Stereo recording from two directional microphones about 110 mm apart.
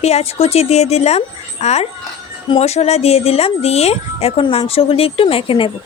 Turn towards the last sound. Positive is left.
turn(degrees=55)  # may be behind; listen again after turning